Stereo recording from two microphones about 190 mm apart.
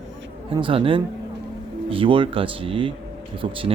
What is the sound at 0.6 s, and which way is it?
Speech, 30° right (ahead or behind).